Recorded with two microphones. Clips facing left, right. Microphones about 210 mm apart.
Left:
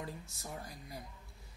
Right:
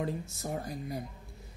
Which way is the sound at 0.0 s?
50° right (ahead or behind).